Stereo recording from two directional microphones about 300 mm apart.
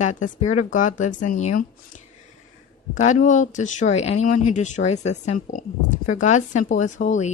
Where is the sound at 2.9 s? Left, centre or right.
Left.